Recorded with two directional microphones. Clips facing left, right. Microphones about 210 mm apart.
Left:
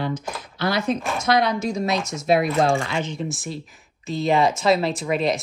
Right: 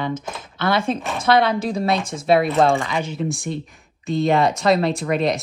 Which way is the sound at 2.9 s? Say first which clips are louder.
Right 3 dB; 10° right (ahead or behind).